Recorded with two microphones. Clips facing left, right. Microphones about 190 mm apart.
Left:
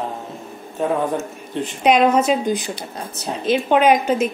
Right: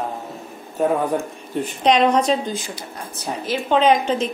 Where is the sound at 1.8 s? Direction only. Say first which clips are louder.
Left 1 dB; 5° left (ahead or behind).